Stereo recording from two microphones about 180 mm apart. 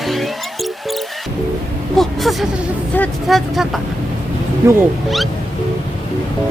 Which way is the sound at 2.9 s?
5° left (ahead or behind).